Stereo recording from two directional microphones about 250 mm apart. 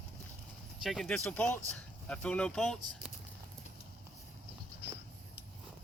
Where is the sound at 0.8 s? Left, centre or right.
Centre.